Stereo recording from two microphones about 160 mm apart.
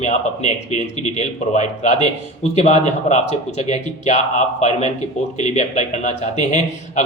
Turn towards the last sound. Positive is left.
turn(degrees=45)  # may be behind; listen again after turning